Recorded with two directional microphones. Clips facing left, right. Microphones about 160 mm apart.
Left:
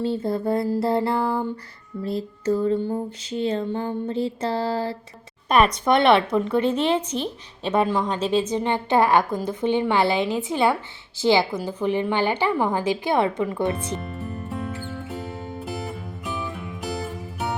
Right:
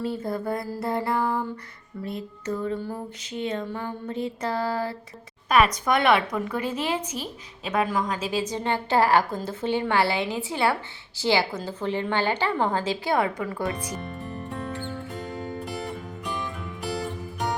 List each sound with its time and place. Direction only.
0.0 s a woman's voice: 30° left (ahead or behind)
2.0 s a sound: 30° left (ahead or behind)
5.5 s a woman's voice: 35° left (ahead or behind)
14.2 s music: 5° left (ahead or behind)